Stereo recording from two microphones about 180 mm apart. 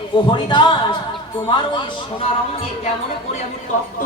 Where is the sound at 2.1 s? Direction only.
35° left (ahead or behind).